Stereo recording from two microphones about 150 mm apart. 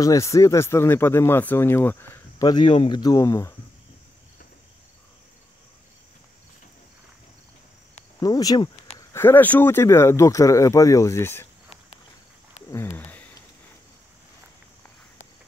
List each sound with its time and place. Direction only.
0.0 s speech: 20° left (ahead or behind)
2.4 s speech: 30° left (ahead or behind)
8.2 s speech: 25° left (ahead or behind)
12.6 s a sound: 15° left (ahead or behind)